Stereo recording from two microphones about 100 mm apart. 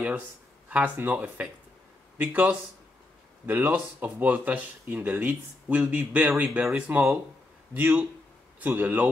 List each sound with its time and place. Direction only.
0.7 s speech: 15° right (ahead or behind)